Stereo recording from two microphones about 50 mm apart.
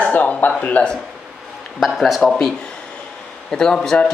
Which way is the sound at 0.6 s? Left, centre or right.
Left.